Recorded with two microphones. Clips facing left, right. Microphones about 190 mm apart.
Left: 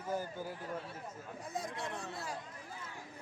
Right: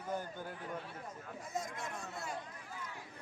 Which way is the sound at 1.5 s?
35° left (ahead or behind).